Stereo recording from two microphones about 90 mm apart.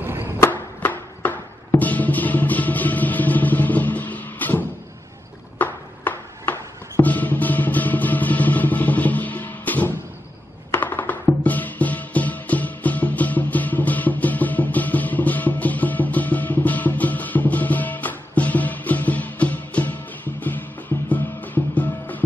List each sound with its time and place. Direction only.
0.0 s chop: 25° right (ahead or behind)
0.4 s music: 20° left (ahead or behind)